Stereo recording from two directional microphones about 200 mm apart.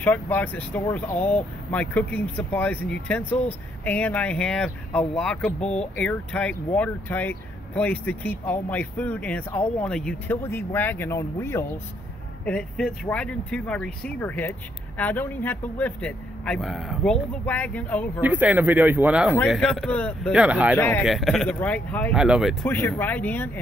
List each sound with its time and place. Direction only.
0.0 s speech: 10° left (ahead or behind)
12.4 s speech: 5° left (ahead or behind)
18.2 s speech: 10° right (ahead or behind)
20.3 s speech: 5° right (ahead or behind)
22.1 s speech: 5° right (ahead or behind)
22.7 s speech: 10° left (ahead or behind)